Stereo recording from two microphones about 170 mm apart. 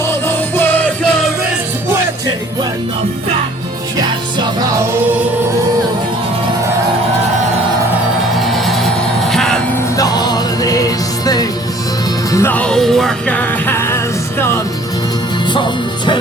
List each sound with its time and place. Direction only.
0.0 s music: 15° left (ahead or behind)
3.9 s music: 25° right (ahead or behind)
8.4 s music: centre (ahead or behind)
10.0 s music: 25° left (ahead or behind)